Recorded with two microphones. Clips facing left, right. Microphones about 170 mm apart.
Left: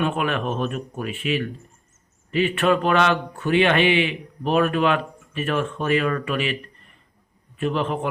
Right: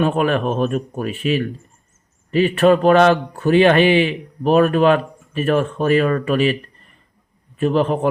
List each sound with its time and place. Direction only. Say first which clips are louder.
0.0 s a man's voice: right 6 dB; 40° right (ahead or behind)